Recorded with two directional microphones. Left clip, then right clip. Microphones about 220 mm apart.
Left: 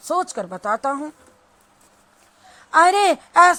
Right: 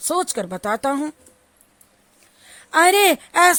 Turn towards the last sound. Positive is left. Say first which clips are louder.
# left 2 dB
turn(degrees=-30)  # may be behind; listen again after turning